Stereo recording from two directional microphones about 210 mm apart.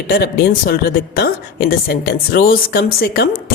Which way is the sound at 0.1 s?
50° left (ahead or behind).